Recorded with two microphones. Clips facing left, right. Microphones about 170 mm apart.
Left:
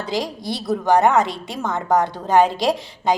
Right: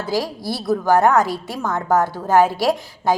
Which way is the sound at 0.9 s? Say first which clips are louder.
Even; centre (ahead or behind).